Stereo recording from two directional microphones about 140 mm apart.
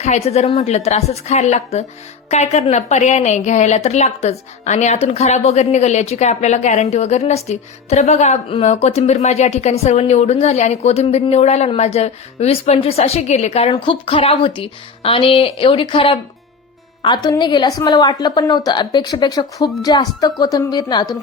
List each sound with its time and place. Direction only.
0.0 s a woman's voice: 50° left (ahead or behind); by 21.1 s 30° left (ahead or behind)